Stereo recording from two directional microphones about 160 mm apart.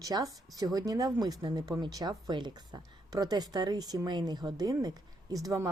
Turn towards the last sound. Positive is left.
turn(degrees=-20)  # may be behind; listen again after turning